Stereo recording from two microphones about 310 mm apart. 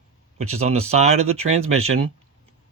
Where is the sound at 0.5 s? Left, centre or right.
Centre.